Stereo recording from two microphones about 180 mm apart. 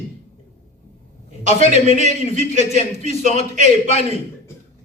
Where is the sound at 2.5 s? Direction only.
35° left (ahead or behind).